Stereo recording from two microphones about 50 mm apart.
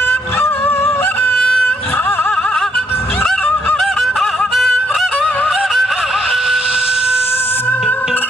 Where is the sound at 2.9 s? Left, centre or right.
Left.